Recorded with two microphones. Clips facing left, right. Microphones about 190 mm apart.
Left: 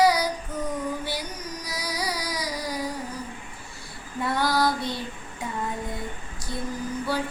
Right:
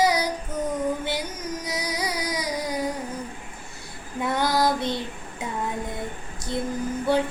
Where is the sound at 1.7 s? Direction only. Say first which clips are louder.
Right 1 dB; 20° right (ahead or behind).